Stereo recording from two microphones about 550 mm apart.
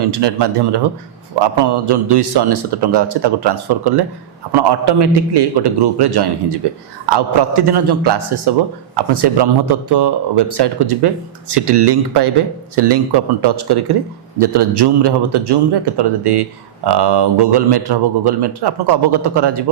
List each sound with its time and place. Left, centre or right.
0.0 s a man's voice: right